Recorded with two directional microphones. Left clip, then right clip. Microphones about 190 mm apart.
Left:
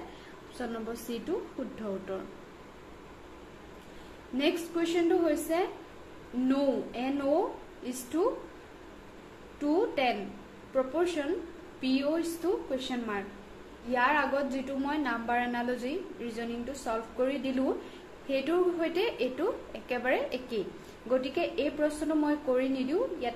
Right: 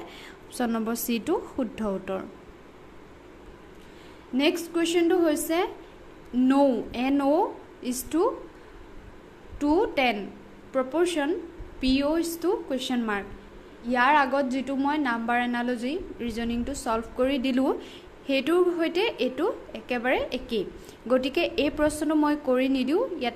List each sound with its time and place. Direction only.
0.6 s a woman's voice: 50° right (ahead or behind)
4.4 s a woman's voice: 40° right (ahead or behind)
9.6 s a woman's voice: 40° right (ahead or behind)